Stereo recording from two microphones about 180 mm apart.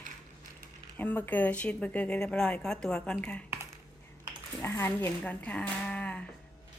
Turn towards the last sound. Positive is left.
turn(degrees=5)  # may be behind; listen again after turning